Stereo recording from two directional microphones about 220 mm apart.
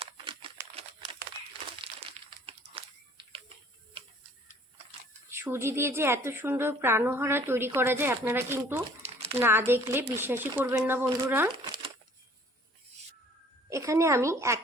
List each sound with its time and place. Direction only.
0.0 s crumpling: 25° right (ahead or behind)
1.8 s a sound: 25° right (ahead or behind)
5.3 s a woman's voice: 10° right (ahead or behind)
9.0 s a sound: 30° right (ahead or behind)
9.4 s a woman's voice: 10° right (ahead or behind)
13.7 s speech: 15° right (ahead or behind)